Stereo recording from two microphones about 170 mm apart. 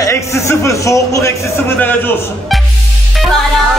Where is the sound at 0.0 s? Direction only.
15° left (ahead or behind).